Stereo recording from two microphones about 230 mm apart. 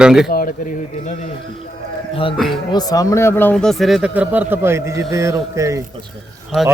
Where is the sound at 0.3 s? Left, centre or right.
Left.